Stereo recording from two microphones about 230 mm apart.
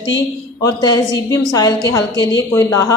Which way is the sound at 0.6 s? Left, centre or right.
Centre.